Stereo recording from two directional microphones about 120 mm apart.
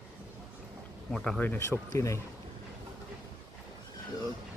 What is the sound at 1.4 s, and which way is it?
Speech, 15° left (ahead or behind).